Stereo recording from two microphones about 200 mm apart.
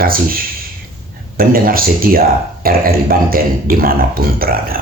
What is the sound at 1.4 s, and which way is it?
Speech, 45° right (ahead or behind).